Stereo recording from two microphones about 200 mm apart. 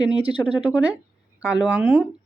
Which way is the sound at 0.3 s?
5° right (ahead or behind).